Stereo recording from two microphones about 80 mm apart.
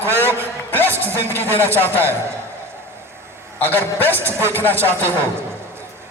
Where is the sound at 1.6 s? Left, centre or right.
Right.